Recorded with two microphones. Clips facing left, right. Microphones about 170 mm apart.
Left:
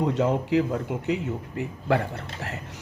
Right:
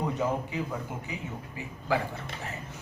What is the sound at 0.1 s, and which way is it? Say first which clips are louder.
Speech: left 7 dB; 75° left (ahead or behind).